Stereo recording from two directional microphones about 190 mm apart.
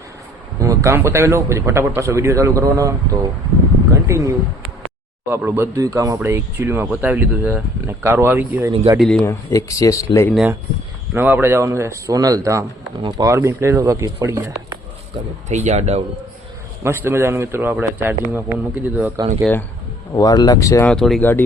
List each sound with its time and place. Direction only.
0.6 s a man's voice: 15° right (ahead or behind)
5.5 s speech: 15° right (ahead or behind)
8.7 s speech: 25° right (ahead or behind)
9.0 s speech: 5° left (ahead or behind)
9.2 s speech: 15° left (ahead or behind)
11.1 s speech: 10° right (ahead or behind)
15.1 s speech: 35° right (ahead or behind)
16.8 s speech: 15° right (ahead or behind)
20.1 s speech: 20° left (ahead or behind)
20.9 s speech: centre (ahead or behind)